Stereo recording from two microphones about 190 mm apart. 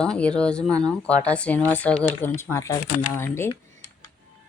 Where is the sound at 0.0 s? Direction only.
5° left (ahead or behind).